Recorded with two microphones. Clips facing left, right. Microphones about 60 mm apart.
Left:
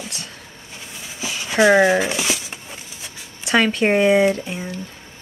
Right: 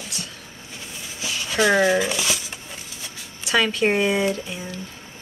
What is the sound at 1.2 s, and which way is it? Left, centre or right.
Speech, left.